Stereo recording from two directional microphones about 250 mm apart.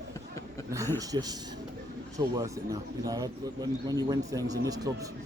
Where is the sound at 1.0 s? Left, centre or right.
Centre.